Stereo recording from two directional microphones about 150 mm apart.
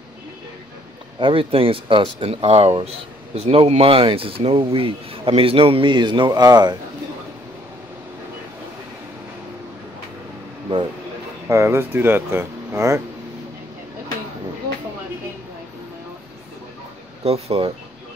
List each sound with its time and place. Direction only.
1.2 s speech: 35° right (ahead or behind)
11.4 s speech: 15° right (ahead or behind)
17.2 s speech: 40° right (ahead or behind)